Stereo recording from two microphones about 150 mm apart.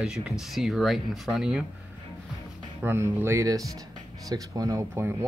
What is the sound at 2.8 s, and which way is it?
Speech, 15° right (ahead or behind).